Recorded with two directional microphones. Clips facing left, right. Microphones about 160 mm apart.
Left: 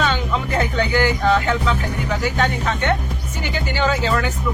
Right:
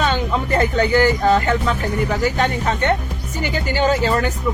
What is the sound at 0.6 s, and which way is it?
Speech, 45° right (ahead or behind).